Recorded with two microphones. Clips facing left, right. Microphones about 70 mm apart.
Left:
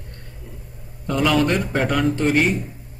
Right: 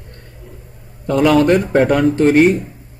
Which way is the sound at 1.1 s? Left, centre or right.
Right.